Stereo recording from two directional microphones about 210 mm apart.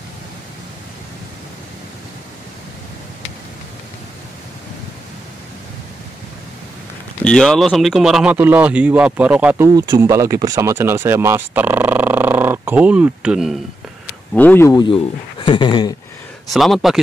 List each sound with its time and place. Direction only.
7.2 s speech: centre (ahead or behind)
14.3 s speech: 10° left (ahead or behind)
15.4 s a sound: 20° left (ahead or behind)
16.5 s speech: centre (ahead or behind)